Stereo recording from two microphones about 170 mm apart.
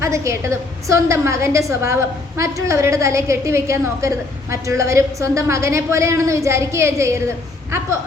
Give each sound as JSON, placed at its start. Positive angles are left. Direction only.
{"t": 0.0, "sound": "a woman's voice", "side_deg": -15}